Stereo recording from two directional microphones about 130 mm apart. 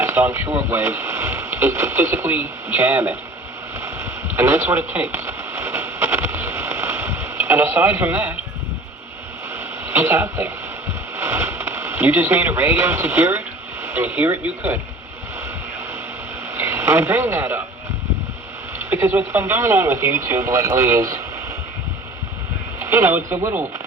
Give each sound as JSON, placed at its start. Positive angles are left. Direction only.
{"t": 0.0, "sound": "speech", "side_deg": -20}
{"t": 4.4, "sound": "a sound", "side_deg": -20}
{"t": 9.8, "sound": "speech", "side_deg": -20}
{"t": 16.6, "sound": "speech", "side_deg": -20}
{"t": 18.8, "sound": "speech", "side_deg": -15}
{"t": 22.8, "sound": "speech", "side_deg": -20}